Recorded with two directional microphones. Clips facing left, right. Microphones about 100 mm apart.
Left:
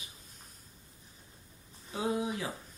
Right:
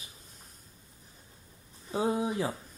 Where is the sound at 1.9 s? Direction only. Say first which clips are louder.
Right 4 dB; 30° right (ahead or behind).